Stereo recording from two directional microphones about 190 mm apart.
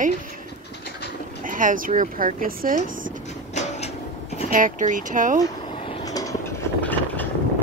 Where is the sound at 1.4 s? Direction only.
45° right (ahead or behind).